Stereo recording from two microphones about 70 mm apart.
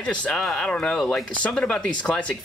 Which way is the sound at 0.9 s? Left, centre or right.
Centre.